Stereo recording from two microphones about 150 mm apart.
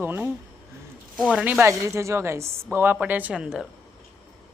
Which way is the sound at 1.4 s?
10° right (ahead or behind).